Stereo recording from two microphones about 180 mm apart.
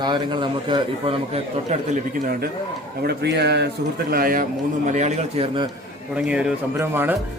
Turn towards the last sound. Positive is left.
turn(degrees=-10)  # may be behind; listen again after turning